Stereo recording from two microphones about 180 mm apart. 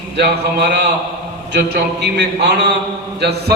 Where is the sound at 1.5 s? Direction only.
65° right (ahead or behind).